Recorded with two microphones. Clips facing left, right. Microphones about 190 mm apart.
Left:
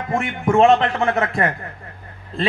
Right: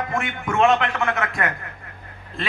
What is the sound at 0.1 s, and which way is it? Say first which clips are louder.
A man's voice: left 6 dB; 35° left (ahead or behind).